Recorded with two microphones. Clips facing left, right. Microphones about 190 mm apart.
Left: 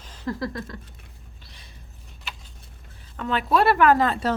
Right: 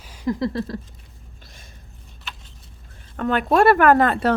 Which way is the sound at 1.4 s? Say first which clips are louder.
Right 4 dB; 45° right (ahead or behind).